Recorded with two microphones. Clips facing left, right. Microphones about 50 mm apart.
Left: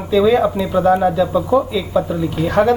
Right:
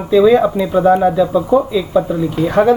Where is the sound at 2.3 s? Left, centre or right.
Right.